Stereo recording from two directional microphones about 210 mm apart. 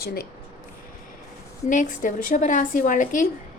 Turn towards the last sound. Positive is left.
turn(degrees=40)  # may be behind; listen again after turning